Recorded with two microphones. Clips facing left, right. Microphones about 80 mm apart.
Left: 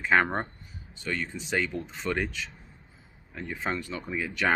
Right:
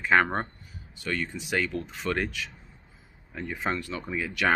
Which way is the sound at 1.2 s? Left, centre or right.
Centre.